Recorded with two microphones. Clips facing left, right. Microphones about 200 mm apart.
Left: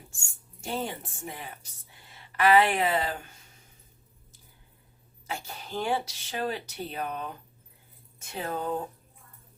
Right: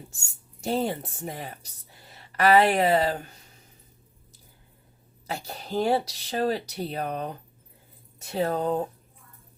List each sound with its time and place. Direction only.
0.6 s speech: 40° right (ahead or behind)
5.2 s speech: 40° right (ahead or behind)